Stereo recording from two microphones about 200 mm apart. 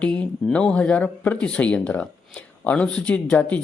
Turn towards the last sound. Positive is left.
turn(degrees=5)  # may be behind; listen again after turning